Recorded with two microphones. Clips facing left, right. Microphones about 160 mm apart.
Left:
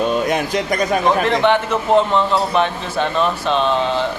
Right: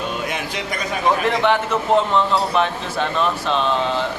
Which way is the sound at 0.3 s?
45° left (ahead or behind).